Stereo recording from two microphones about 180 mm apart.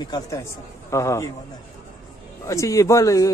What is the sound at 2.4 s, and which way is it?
Speech, 15° left (ahead or behind).